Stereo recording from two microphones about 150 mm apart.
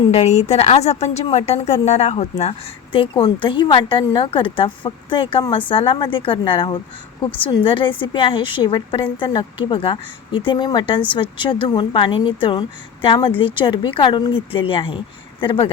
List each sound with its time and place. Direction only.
0.1 s a woman's voice: 50° left (ahead or behind)